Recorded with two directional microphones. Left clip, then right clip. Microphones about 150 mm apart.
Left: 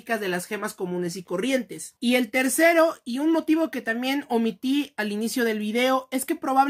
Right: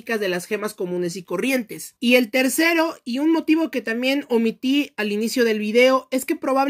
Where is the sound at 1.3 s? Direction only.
45° right (ahead or behind).